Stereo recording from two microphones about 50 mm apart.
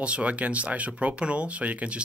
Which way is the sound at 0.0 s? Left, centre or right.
Right.